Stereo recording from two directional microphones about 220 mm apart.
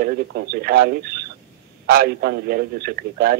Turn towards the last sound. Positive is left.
turn(degrees=-45)  # may be behind; listen again after turning